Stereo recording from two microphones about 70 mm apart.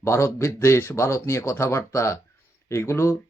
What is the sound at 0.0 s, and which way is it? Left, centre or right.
Speech, left.